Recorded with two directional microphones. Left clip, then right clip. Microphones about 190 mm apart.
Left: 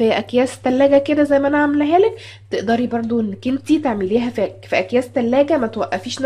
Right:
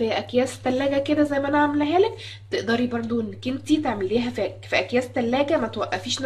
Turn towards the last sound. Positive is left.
turn(degrees=45)  # may be behind; listen again after turning